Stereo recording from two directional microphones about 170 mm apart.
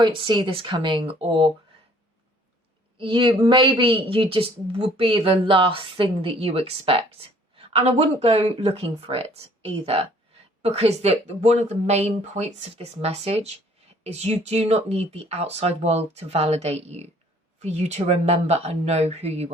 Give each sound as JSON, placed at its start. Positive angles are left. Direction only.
{"t": 0.3, "sound": "speech", "side_deg": -30}
{"t": 3.0, "sound": "a woman's voice", "side_deg": -30}